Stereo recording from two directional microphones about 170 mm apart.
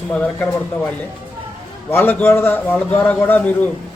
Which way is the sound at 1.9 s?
10° left (ahead or behind).